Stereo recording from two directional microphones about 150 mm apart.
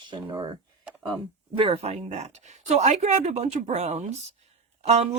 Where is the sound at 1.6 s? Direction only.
40° right (ahead or behind).